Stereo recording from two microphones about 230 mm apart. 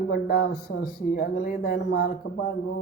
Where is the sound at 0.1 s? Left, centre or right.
Left.